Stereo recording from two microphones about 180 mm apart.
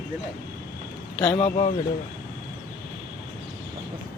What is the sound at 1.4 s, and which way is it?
Speech, 40° left (ahead or behind).